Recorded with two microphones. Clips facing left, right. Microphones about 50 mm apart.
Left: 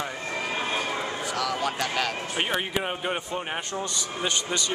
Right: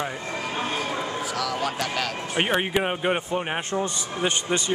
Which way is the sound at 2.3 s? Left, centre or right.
Right.